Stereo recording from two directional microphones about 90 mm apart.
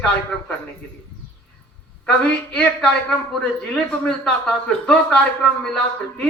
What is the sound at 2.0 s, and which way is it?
A man's voice, 10° left (ahead or behind).